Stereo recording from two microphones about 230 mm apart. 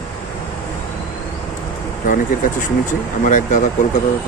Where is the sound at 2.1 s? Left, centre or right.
Left.